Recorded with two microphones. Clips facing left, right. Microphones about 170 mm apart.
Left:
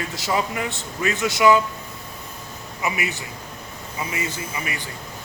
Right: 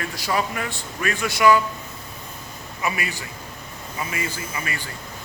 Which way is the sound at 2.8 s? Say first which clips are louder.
Left 1 dB; 20° left (ahead or behind).